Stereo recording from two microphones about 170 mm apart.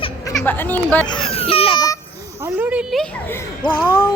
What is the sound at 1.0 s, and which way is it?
Speech, 30° left (ahead or behind).